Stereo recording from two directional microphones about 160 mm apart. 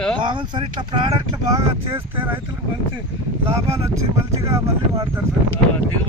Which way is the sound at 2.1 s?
10° right (ahead or behind).